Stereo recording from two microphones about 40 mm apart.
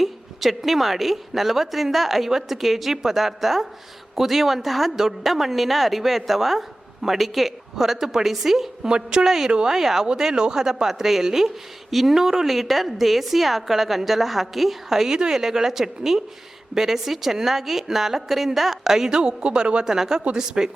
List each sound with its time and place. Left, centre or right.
0.0 s a woman's voice: centre
8.9 s a woman's voice: right
9.2 s a woman's voice: centre; by 19.8 s right
19.8 s a woman's voice: centre